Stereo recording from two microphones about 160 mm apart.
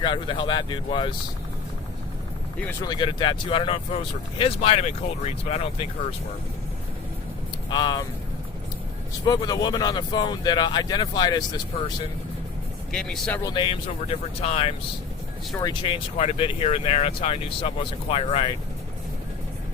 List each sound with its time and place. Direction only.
0.0 s speech: 30° left (ahead or behind)
2.8 s speech: 30° left (ahead or behind)
7.7 s speech: 25° left (ahead or behind)
9.2 s speech: 25° left (ahead or behind)
12.9 s speech: 5° left (ahead or behind)
13.4 s speech: 30° left (ahead or behind)